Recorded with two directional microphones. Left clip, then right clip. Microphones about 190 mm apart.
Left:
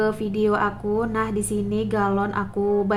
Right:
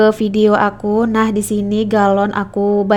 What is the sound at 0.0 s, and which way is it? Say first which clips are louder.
A woman's voice: right 10 dB; 40° right (ahead or behind).